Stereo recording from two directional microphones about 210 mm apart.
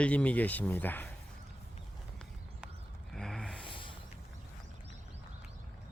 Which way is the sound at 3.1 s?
5° left (ahead or behind).